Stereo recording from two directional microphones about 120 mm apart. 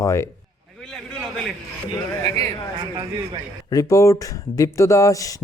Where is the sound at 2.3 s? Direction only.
45° right (ahead or behind).